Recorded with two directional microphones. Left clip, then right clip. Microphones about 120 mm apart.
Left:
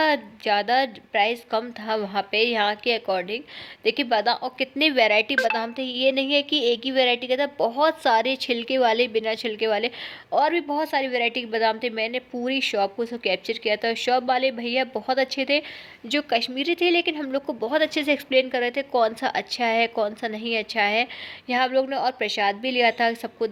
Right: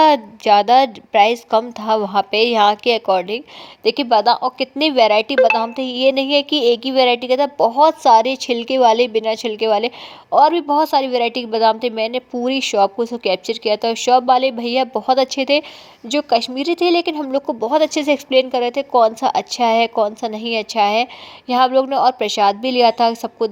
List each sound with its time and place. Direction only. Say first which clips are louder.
0.0 s a woman's voice: right 9 dB; 45° right (ahead or behind)
17.4 s speech: right 7 dB; 25° right (ahead or behind)